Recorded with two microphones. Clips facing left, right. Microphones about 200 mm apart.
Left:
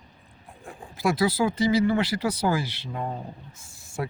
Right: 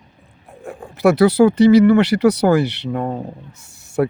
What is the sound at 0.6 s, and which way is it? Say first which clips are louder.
Speech: right 11 dB; 70° right (ahead or behind).